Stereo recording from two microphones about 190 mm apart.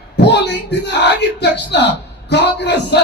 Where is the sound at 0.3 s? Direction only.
65° left (ahead or behind).